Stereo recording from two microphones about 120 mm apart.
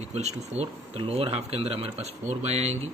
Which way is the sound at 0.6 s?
55° right (ahead or behind).